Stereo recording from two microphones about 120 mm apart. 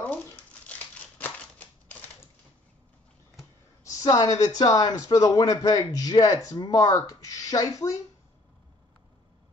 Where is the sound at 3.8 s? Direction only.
30° left (ahead or behind).